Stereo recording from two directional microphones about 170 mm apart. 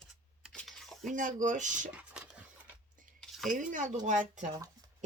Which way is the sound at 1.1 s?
50° right (ahead or behind).